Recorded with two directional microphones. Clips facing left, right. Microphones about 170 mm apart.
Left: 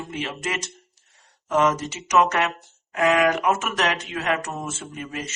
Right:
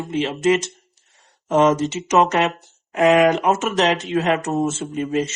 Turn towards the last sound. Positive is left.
turn(degrees=-25)  # may be behind; listen again after turning